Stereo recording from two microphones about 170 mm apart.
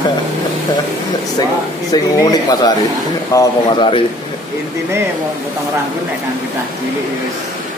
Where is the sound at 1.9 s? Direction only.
20° left (ahead or behind).